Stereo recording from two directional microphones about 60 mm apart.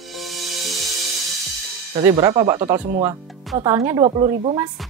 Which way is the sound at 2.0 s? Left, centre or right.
Right.